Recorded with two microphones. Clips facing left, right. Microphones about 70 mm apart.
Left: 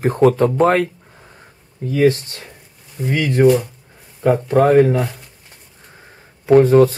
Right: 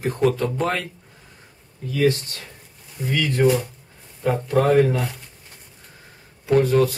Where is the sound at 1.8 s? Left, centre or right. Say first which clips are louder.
Left 5 dB; left.